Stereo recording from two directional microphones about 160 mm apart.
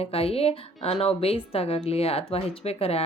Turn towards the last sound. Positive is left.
turn(degrees=40)  # may be behind; listen again after turning